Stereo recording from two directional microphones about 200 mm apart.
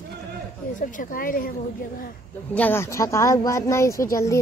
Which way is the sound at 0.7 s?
40° left (ahead or behind).